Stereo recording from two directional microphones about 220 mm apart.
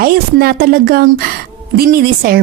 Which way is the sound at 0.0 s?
45° right (ahead or behind).